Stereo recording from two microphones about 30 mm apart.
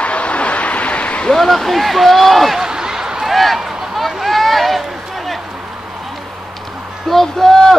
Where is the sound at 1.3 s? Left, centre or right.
Centre.